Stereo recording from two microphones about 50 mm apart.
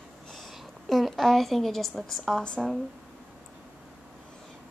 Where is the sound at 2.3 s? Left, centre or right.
Centre.